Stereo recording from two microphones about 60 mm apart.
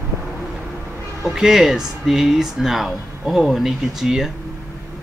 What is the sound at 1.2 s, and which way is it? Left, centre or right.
Speech, centre.